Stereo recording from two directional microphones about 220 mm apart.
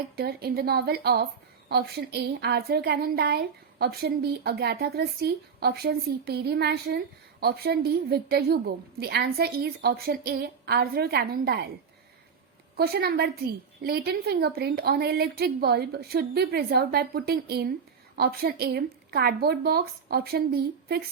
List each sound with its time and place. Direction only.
0.2 s a woman's voice: 45° right (ahead or behind)
12.7 s a woman's voice: 45° right (ahead or behind)